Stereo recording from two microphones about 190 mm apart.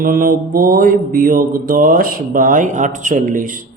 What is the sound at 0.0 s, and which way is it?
A man's voice, 50° right (ahead or behind).